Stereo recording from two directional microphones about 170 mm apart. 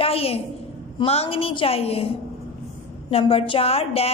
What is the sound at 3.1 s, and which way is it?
A woman's voice, 35° left (ahead or behind).